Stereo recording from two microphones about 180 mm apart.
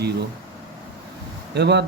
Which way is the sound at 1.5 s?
70° right (ahead or behind).